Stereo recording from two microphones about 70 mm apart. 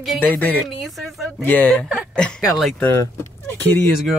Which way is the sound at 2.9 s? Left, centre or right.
Left.